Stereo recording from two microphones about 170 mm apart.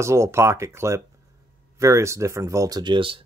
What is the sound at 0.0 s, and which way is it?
Speech, 15° right (ahead or behind).